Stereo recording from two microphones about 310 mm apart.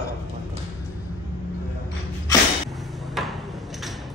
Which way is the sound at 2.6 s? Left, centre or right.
Centre.